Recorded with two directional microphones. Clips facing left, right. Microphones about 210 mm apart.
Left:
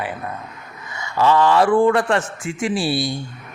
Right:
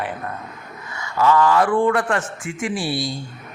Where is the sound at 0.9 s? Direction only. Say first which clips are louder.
Left 1 dB; 25° left (ahead or behind).